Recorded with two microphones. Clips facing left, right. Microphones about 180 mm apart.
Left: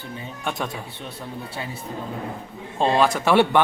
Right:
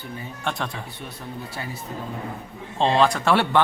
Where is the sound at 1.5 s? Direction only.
25° left (ahead or behind).